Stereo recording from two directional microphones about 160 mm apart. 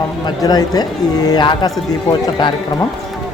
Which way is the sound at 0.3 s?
25° left (ahead or behind).